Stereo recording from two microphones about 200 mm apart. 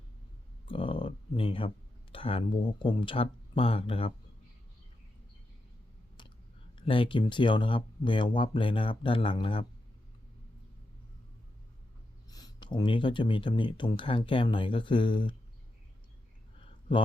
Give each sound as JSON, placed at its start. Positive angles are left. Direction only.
{"t": 0.7, "sound": "a sound", "side_deg": 25}
{"t": 2.1, "sound": "speech", "side_deg": 25}
{"t": 6.7, "sound": "speech", "side_deg": 25}
{"t": 12.3, "sound": "speech", "side_deg": 20}